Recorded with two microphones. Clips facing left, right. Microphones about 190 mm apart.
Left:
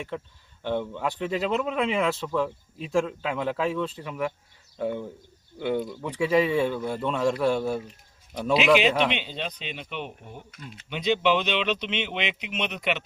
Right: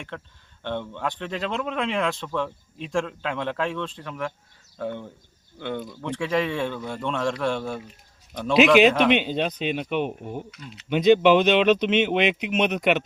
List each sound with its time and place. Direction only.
0.1 s a man's voice: 5° left (ahead or behind)
9.1 s speech: 50° right (ahead or behind)